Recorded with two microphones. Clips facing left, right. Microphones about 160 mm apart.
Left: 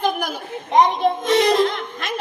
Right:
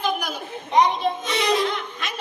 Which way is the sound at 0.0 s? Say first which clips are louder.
Left 3 dB; 50° left (ahead or behind).